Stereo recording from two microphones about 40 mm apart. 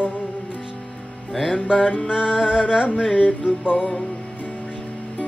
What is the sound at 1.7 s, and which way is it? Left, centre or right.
Music, left.